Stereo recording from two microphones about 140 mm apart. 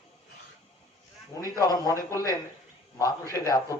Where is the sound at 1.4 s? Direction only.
25° left (ahead or behind).